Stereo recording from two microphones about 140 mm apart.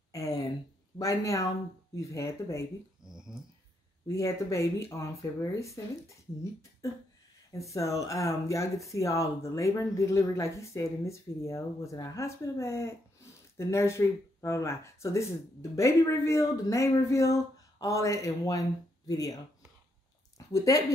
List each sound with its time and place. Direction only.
0.1 s a sound: 25° left (ahead or behind)
0.9 s speech: 25° left (ahead or behind)
3.1 s dog: 5° right (ahead or behind)
4.1 s speech: 20° left (ahead or behind)
7.7 s speech: 20° left (ahead or behind)
20.3 s speech: 25° left (ahead or behind)